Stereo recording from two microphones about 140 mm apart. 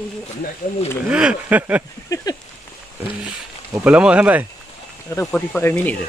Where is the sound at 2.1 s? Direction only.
25° left (ahead or behind).